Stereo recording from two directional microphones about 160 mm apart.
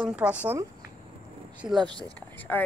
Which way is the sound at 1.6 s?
15° right (ahead or behind).